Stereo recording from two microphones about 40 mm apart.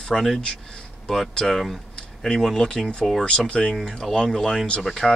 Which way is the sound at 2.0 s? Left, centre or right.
Centre.